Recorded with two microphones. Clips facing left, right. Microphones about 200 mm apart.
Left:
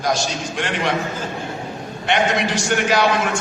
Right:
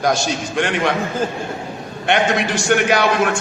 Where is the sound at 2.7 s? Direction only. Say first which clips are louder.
Right 4 dB; 55° right (ahead or behind).